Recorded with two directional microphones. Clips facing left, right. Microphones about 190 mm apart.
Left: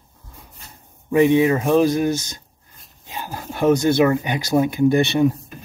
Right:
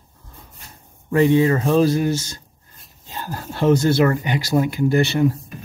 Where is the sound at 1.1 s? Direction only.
15° left (ahead or behind).